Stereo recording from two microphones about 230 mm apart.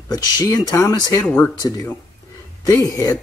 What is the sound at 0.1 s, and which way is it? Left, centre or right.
Speech, centre.